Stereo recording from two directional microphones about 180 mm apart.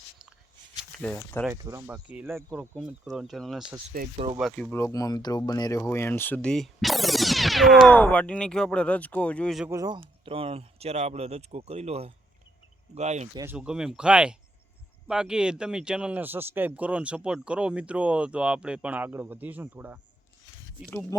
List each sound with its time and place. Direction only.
0.9 s speech: 5° left (ahead or behind)
1.5 s speech: 10° right (ahead or behind); by 4.8 s 5° left (ahead or behind)
4.8 s speech: 20° left (ahead or behind); by 9.6 s 5° left (ahead or behind)
9.6 s speech: 20° right (ahead or behind); by 13.2 s 40° right (ahead or behind)
13.3 s speech: 15° right (ahead or behind)
13.6 s speech: 5° right (ahead or behind)